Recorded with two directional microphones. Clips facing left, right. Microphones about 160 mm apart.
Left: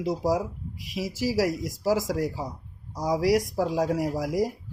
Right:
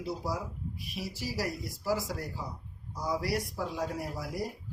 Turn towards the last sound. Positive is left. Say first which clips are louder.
# left 10 dB
turn(degrees=90)